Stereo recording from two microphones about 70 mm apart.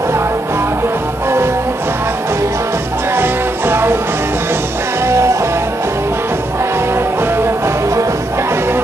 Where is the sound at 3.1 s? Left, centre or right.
Right.